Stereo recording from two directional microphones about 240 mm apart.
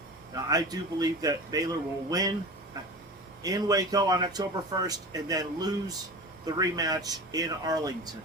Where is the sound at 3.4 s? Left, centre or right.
Centre.